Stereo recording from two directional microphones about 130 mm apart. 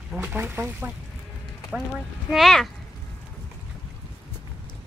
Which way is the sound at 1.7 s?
5° right (ahead or behind).